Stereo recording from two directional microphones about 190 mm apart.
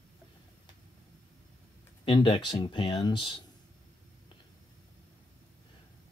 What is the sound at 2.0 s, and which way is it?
Speech, 25° left (ahead or behind).